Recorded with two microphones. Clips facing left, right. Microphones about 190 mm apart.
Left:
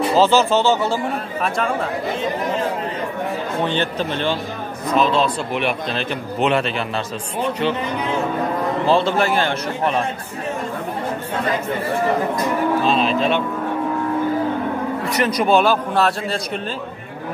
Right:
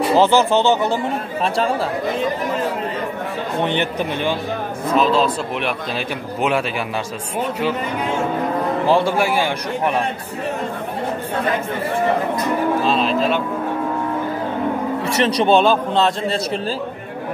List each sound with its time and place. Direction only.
0.1 s a man's voice: 15° right (ahead or behind)
3.6 s a man's voice: 15° right (ahead or behind)
8.8 s a man's voice: 10° right (ahead or behind)
12.8 s speech: centre (ahead or behind)
15.0 s speech: 30° right (ahead or behind)